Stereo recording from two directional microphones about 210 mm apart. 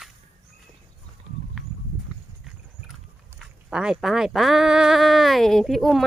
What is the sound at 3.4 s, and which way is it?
Speech, 5° right (ahead or behind).